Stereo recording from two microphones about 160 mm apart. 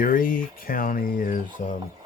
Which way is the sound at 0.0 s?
60° left (ahead or behind).